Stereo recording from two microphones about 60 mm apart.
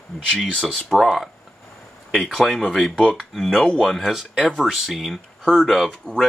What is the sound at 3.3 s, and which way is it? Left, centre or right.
Speech, centre.